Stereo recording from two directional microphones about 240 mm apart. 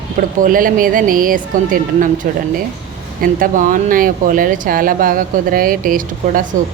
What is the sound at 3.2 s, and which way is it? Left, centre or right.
A woman's voice, right.